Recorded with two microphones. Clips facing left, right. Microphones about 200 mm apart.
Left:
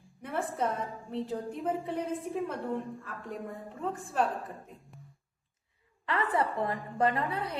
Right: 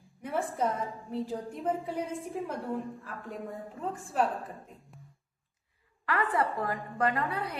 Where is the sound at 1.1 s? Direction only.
5° right (ahead or behind).